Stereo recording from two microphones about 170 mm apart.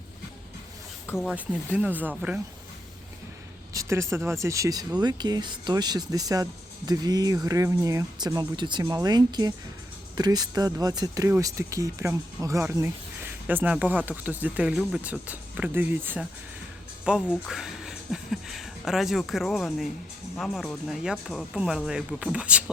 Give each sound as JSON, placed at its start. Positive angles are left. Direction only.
{"t": 1.2, "sound": "speech", "side_deg": -5}
{"t": 3.7, "sound": "speech", "side_deg": -20}